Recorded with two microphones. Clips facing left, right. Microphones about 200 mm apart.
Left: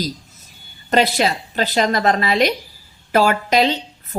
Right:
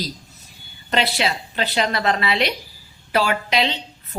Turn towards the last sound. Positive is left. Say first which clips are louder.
# left 5 dB
turn(degrees=45)  # may be behind; listen again after turning